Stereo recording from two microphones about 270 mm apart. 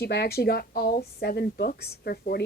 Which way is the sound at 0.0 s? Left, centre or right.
Left.